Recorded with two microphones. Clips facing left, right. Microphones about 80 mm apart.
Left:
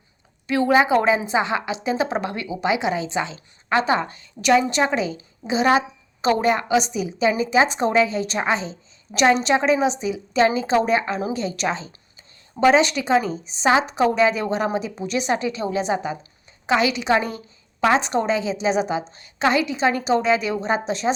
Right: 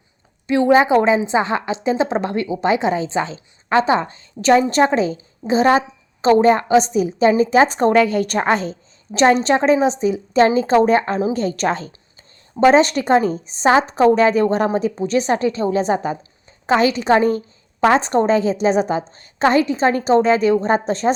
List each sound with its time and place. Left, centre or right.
0.4 s a woman's voice: right
9.1 s a woman's voice: right